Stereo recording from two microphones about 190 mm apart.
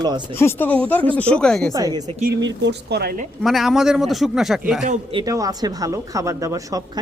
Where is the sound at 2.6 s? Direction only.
65° right (ahead or behind).